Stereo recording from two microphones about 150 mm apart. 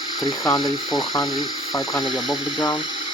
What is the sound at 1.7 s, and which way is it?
Speech, 25° left (ahead or behind).